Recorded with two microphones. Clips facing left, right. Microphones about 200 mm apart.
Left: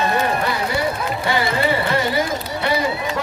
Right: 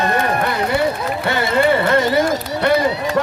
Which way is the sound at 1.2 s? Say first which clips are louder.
Right 4 dB; 55° right (ahead or behind).